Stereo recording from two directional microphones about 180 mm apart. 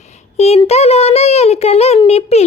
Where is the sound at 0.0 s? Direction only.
40° left (ahead or behind).